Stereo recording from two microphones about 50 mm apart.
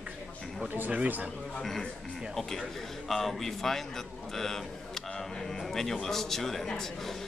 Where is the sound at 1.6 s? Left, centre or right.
Centre.